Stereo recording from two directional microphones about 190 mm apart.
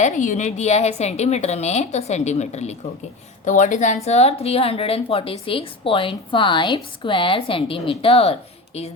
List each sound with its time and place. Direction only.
0.0 s a woman's voice: 40° left (ahead or behind)